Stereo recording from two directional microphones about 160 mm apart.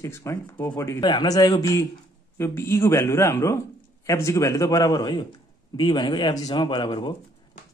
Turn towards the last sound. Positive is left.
turn(degrees=30)  # may be behind; listen again after turning